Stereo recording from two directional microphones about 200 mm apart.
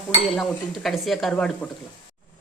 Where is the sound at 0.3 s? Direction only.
Centre (ahead or behind).